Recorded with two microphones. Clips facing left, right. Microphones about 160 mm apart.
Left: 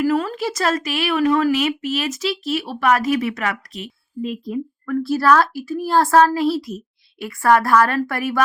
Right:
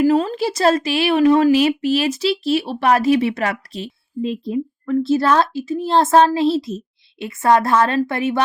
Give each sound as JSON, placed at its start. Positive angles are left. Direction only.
{"t": 0.0, "sound": "a woman's voice", "side_deg": -25}